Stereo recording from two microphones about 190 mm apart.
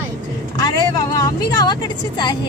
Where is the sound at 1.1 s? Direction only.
20° left (ahead or behind).